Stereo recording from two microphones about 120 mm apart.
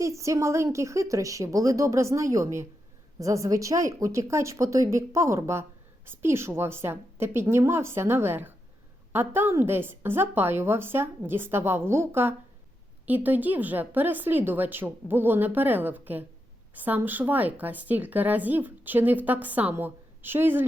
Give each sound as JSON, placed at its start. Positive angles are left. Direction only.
{"t": 0.0, "sound": "a woman's voice", "side_deg": -25}